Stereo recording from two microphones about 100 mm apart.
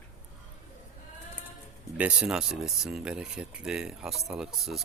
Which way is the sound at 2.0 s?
10° right (ahead or behind).